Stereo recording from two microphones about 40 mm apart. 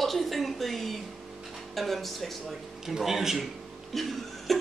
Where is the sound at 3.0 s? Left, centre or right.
Centre.